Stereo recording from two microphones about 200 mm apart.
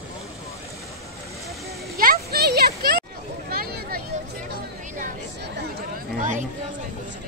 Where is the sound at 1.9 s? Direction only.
50° right (ahead or behind).